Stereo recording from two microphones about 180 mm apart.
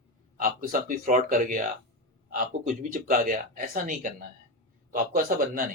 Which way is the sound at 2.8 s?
50° right (ahead or behind).